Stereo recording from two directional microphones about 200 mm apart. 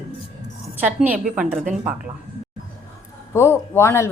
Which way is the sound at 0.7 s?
10° right (ahead or behind).